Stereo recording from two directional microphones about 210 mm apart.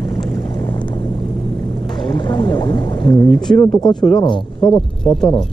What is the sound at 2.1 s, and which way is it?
Speech, 20° left (ahead or behind).